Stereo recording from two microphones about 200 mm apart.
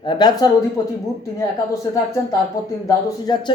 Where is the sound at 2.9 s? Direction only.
20° left (ahead or behind).